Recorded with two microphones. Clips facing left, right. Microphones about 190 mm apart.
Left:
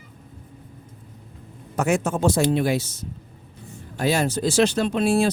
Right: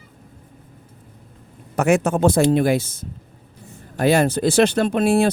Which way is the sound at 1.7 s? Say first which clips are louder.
Right 5 dB; 65° right (ahead or behind).